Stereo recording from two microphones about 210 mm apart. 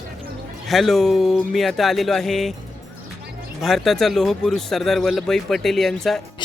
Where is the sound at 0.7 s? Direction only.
Centre (ahead or behind).